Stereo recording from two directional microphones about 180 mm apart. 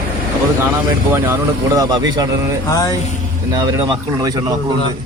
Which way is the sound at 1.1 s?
15° right (ahead or behind).